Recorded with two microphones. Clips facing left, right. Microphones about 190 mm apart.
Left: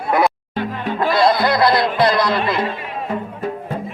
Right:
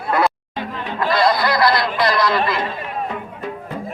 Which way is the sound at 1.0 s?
25° left (ahead or behind).